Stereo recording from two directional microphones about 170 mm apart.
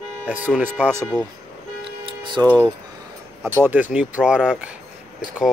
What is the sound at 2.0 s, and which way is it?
Tick-tock, 25° right (ahead or behind).